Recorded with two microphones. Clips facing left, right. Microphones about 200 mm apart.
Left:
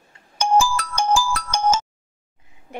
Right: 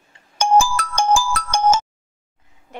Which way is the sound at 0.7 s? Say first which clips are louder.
Right 2 dB; 50° right (ahead or behind).